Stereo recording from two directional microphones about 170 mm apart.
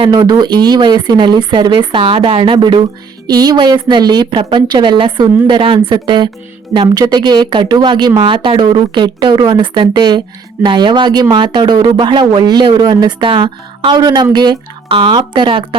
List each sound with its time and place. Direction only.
0.1 s speech: 25° right (ahead or behind)